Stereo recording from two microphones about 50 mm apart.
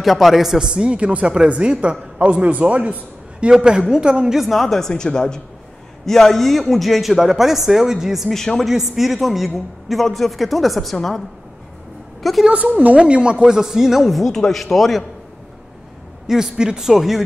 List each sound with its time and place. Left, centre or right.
0.0 s a man's voice: centre
4.4 s speech: centre
8.3 s speech: centre
8.6 s a woman's voice: centre
12.4 s speech: right
13.6 s speech: centre
16.3 s a man's voice: centre